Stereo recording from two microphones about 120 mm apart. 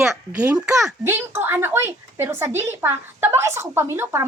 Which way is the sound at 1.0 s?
20° right (ahead or behind).